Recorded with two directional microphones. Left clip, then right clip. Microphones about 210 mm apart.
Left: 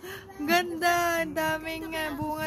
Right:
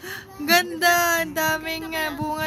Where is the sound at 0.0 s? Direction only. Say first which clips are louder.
Right 4 dB; 5° left (ahead or behind).